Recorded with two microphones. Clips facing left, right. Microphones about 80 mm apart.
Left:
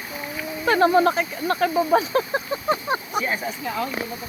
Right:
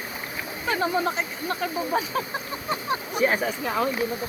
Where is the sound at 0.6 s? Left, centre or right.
Left.